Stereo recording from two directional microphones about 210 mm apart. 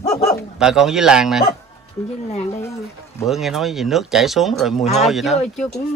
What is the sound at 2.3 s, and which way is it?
Speech, 30° left (ahead or behind).